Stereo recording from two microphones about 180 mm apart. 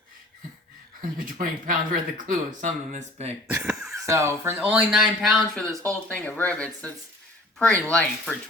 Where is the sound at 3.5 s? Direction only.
15° right (ahead or behind).